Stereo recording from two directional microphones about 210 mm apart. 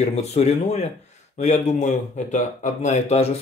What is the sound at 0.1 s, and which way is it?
Speech, 30° left (ahead or behind).